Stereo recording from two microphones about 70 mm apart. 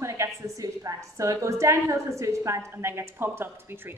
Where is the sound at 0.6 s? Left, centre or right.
Right.